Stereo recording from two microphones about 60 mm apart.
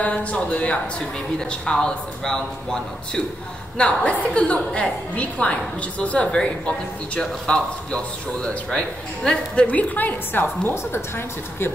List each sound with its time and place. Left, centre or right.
0.0 s a woman's voice: left
10.7 s a woman's voice: left